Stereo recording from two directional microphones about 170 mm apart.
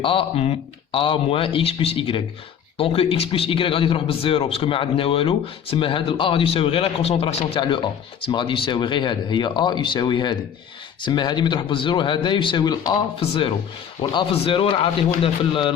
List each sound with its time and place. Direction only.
0.0 s a man's voice: 30° left (ahead or behind)